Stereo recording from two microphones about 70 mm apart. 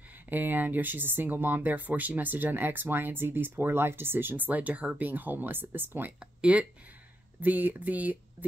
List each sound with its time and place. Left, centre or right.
0.3 s speech: right
6.1 s speech: centre